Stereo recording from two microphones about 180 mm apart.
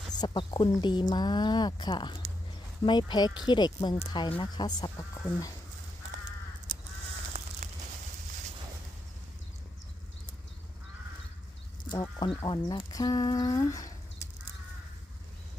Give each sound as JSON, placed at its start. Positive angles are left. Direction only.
{"t": 0.2, "sound": "speech", "side_deg": 25}
{"t": 6.7, "sound": "crow", "side_deg": 25}
{"t": 11.9, "sound": "speech", "side_deg": 25}